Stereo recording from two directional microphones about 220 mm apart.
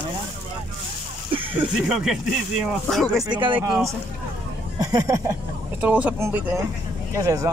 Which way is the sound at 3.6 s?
5° right (ahead or behind).